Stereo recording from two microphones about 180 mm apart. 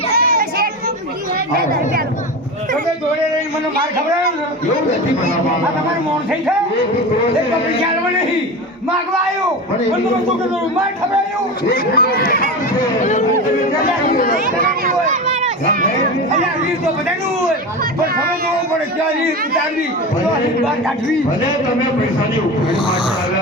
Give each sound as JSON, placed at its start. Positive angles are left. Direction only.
{"t": 0.1, "sound": "child singing", "side_deg": -60}
{"t": 11.7, "sound": "speech", "side_deg": 55}
{"t": 13.0, "sound": "speech", "side_deg": 45}
{"t": 14.3, "sound": "speech", "side_deg": -50}